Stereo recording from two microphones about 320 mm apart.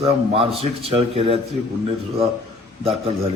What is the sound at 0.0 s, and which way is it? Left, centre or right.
A man's voice, centre.